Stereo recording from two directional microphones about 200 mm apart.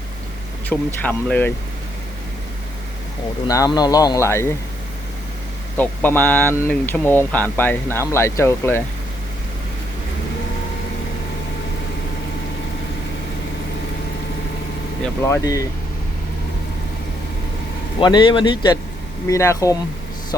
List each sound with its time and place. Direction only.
0.7 s speech: 10° left (ahead or behind)
3.4 s speech: 20° left (ahead or behind)
5.7 s speech: 10° left (ahead or behind)
15.2 s speech: 15° left (ahead or behind)
18.0 s a man's voice: 25° left (ahead or behind)